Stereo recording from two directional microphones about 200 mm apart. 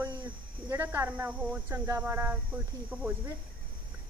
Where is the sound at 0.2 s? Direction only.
10° right (ahead or behind).